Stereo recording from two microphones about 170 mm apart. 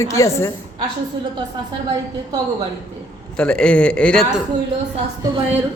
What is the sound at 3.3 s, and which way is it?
A man's voice, 5° left (ahead or behind).